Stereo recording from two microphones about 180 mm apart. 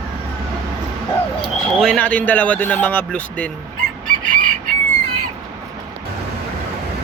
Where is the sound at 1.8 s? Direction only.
5° left (ahead or behind).